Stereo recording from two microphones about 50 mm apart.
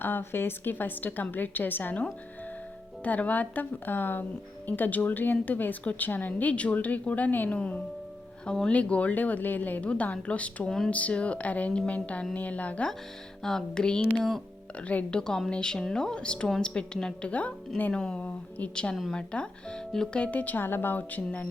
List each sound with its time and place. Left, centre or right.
0.0 s speech: left
10.7 s a woman's voice: centre
10.9 s speech: left
13.4 s a woman's voice: centre
14.8 s a woman's voice: left
18.3 s speech: left
18.7 s a woman's voice: centre; by 21.4 s left